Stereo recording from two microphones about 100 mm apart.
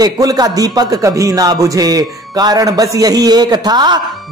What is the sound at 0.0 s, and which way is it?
A man's voice, 40° right (ahead or behind).